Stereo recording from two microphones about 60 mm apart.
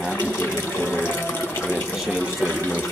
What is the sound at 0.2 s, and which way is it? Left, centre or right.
Water, left.